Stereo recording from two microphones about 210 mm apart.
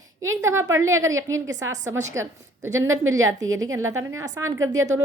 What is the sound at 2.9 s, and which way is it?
Speech, 70° right (ahead or behind).